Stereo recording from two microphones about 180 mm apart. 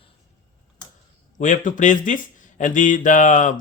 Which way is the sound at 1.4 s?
45° left (ahead or behind).